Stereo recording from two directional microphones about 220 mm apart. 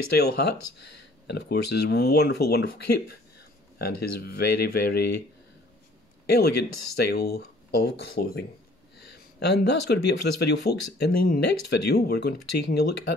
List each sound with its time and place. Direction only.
0.1 s speech: 45° left (ahead or behind)
6.2 s a man's voice: 45° left (ahead or behind)